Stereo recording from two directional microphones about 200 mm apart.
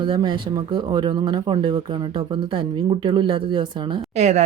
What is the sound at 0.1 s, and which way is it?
Speech, 25° right (ahead or behind).